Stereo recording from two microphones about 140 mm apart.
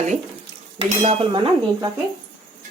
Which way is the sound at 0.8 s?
40° right (ahead or behind).